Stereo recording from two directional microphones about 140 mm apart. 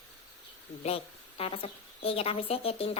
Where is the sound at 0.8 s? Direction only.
45° left (ahead or behind).